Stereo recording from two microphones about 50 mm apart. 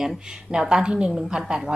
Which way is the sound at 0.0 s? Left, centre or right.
Centre.